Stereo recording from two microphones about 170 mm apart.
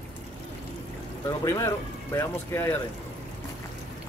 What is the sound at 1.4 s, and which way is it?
Speech, 20° left (ahead or behind).